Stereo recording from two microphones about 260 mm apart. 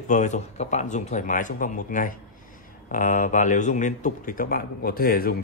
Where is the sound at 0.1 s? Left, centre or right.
Left.